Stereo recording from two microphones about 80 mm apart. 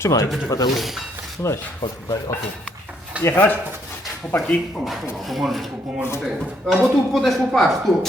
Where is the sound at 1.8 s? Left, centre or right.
Left.